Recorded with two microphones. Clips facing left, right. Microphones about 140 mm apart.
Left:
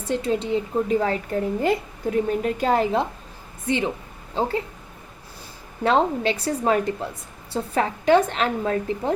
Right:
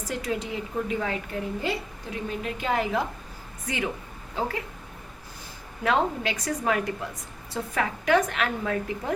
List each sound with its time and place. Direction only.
0.0 s a woman's voice: 30° left (ahead or behind)
5.8 s a woman's voice: 30° left (ahead or behind)